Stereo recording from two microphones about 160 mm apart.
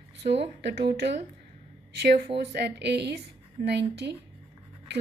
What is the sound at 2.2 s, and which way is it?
A woman's voice, 90° right.